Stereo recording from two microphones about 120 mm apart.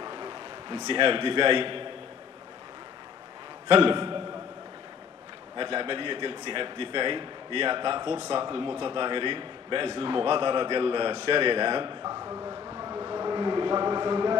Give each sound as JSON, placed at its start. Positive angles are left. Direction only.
{"t": 0.0, "sound": "a man's voice", "side_deg": -40}
{"t": 3.6, "sound": "a man's voice", "side_deg": -45}
{"t": 5.6, "sound": "a man's voice", "side_deg": -45}
{"t": 12.0, "sound": "a sound", "side_deg": -25}